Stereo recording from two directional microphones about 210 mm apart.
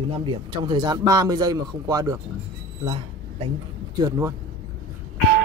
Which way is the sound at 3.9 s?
15° right (ahead or behind).